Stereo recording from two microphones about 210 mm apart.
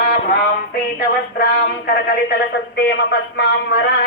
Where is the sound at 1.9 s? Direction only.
50° left (ahead or behind).